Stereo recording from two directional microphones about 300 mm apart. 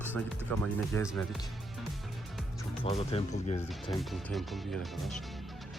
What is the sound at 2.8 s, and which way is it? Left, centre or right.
Speech, centre.